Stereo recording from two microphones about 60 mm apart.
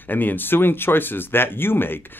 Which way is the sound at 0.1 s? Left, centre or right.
Left.